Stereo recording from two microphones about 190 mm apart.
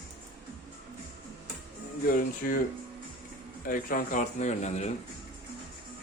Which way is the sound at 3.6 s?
45° left (ahead or behind).